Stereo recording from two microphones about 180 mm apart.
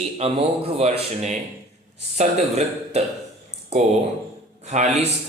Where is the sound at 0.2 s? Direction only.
35° right (ahead or behind).